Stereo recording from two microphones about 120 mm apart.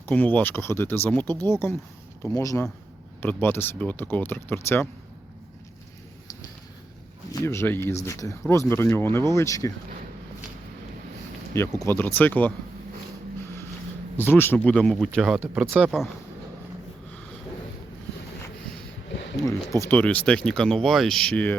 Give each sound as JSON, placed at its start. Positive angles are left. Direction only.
{"t": 0.1, "sound": "speech", "side_deg": 10}
{"t": 7.3, "sound": "speech", "side_deg": 20}
{"t": 11.8, "sound": "speech", "side_deg": 20}
{"t": 14.2, "sound": "speech", "side_deg": 20}
{"t": 14.6, "sound": "speech", "side_deg": 5}
{"t": 19.4, "sound": "speech", "side_deg": 25}
{"t": 20.0, "sound": "speech", "side_deg": 10}